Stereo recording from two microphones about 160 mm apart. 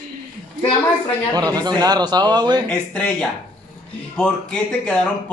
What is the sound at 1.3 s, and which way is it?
A man's voice, 25° right (ahead or behind).